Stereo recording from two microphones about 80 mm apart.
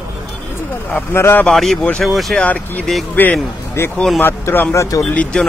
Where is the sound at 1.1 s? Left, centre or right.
Left.